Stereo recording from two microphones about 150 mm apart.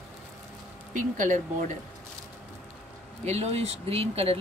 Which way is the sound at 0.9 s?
60° right (ahead or behind).